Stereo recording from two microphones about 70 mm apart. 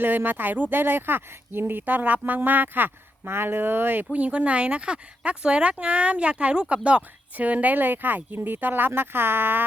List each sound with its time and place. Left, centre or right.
0.0 s speech: right